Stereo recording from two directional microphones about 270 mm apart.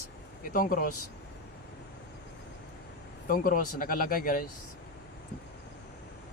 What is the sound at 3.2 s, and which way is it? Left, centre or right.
Speech, left.